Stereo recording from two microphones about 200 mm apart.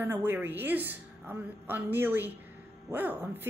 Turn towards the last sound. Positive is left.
turn(degrees=-10)  # may be behind; listen again after turning